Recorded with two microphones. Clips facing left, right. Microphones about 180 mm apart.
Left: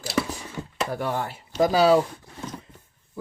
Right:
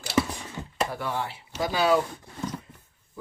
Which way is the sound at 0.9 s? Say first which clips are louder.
Left 3 dB; 45° left (ahead or behind).